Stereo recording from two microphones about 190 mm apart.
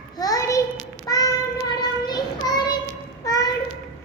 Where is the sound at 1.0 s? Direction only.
20° left (ahead or behind).